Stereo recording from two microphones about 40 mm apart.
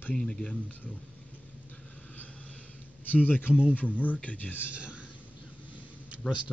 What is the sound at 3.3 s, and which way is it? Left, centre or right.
A man's voice, left.